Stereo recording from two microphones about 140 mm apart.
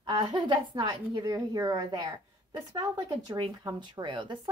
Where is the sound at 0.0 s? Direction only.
35° right (ahead or behind).